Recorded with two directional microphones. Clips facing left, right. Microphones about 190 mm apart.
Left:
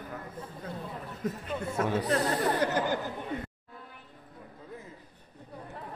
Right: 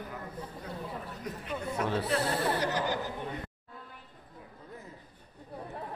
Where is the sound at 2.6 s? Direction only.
55° left (ahead or behind).